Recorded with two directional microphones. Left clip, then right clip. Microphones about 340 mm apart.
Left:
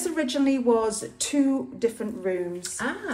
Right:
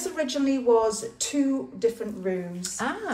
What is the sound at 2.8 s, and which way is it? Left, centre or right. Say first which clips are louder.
Speech: right 2 dB; centre.